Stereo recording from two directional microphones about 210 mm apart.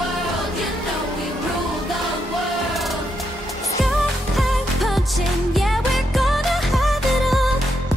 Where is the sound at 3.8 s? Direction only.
Centre (ahead or behind).